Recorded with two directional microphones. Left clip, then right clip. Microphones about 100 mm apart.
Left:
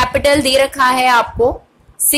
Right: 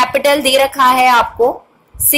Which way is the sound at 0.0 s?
35° left (ahead or behind).